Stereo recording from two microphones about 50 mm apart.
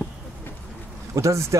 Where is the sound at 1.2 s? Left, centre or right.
Right.